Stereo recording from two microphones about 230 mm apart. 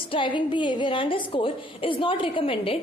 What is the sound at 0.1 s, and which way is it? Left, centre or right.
A woman's voice, left.